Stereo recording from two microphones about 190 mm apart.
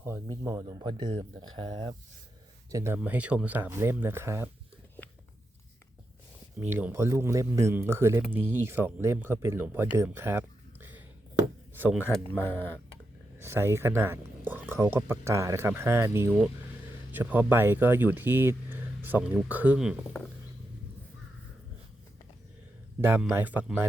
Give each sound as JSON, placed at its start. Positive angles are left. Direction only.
{"t": 0.0, "sound": "speech", "side_deg": -15}
{"t": 2.7, "sound": "speech", "side_deg": -10}
{"t": 6.6, "sound": "speech", "side_deg": -10}
{"t": 10.0, "sound": "a sound", "side_deg": -10}
{"t": 11.7, "sound": "speech", "side_deg": -10}
{"t": 13.4, "sound": "speech", "side_deg": -15}
{"t": 23.0, "sound": "speech", "side_deg": -10}